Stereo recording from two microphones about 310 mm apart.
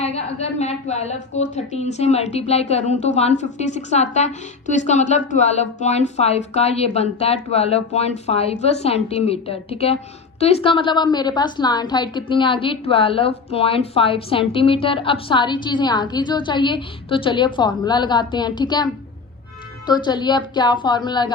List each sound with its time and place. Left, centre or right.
0.6 s a woman's voice: left
19.9 s a woman's voice: centre